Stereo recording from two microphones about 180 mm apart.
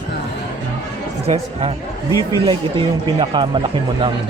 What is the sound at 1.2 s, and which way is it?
Speech, 35° right (ahead or behind).